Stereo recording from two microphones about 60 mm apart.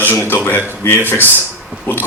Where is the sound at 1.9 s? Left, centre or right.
Left.